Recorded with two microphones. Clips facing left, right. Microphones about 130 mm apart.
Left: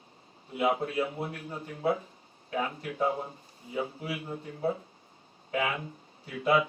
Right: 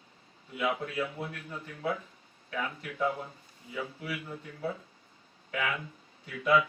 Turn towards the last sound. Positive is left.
turn(degrees=30)  # may be behind; listen again after turning